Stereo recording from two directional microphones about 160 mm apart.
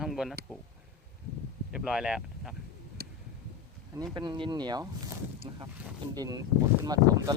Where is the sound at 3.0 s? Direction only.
75° right (ahead or behind).